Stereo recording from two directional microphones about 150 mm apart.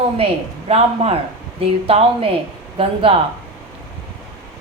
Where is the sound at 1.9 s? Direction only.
40° right (ahead or behind).